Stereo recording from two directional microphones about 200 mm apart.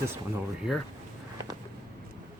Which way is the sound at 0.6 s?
5° right (ahead or behind).